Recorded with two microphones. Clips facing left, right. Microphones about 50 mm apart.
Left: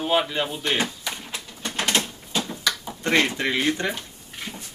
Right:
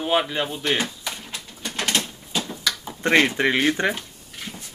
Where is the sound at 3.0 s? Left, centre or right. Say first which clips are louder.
Right 4 dB; centre.